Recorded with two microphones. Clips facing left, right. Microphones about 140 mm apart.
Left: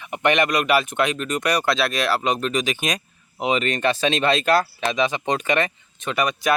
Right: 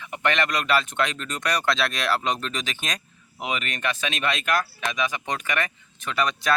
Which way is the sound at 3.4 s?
30° left (ahead or behind).